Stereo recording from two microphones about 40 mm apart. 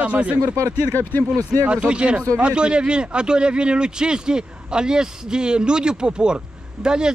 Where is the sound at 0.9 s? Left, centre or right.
Left.